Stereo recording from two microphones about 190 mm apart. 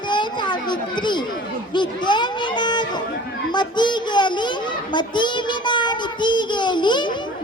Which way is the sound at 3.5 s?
25° left (ahead or behind).